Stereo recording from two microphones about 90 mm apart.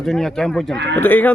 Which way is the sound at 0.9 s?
20° left (ahead or behind).